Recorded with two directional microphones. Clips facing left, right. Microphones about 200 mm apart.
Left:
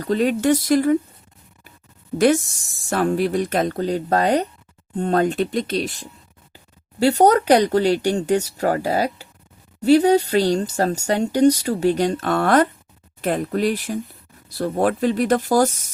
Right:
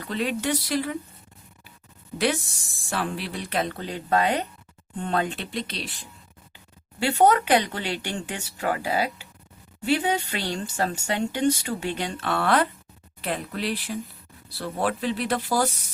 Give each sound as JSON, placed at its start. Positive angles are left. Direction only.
{"t": 0.0, "sound": "speech", "side_deg": 45}
{"t": 2.1, "sound": "speech", "side_deg": 45}